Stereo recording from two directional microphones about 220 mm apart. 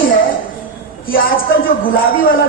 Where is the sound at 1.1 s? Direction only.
40° left (ahead or behind).